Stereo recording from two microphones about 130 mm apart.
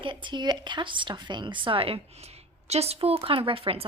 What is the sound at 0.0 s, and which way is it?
A woman's voice, 40° right (ahead or behind).